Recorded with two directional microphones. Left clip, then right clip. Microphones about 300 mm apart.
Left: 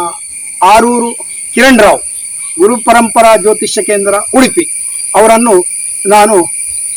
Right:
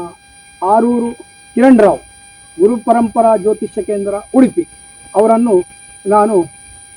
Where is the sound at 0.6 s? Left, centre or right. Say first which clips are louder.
Left 7 dB; centre.